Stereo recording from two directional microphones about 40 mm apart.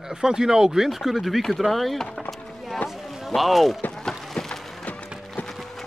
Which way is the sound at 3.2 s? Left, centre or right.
Centre.